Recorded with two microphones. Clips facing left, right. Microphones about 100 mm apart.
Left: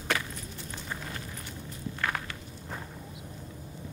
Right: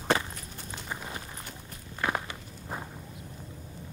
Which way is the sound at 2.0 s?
20° right (ahead or behind).